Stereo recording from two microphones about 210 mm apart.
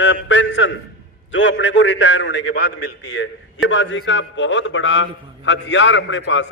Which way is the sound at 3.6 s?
65° left (ahead or behind).